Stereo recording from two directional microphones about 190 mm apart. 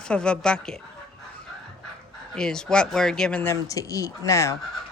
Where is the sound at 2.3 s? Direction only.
5° left (ahead or behind).